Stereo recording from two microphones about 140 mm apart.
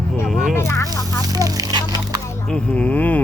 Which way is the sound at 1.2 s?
25° right (ahead or behind).